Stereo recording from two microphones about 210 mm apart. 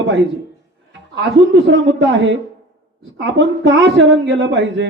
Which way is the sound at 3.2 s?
60° right (ahead or behind).